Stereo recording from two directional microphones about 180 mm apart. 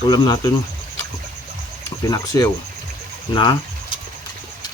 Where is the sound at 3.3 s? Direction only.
25° left (ahead or behind).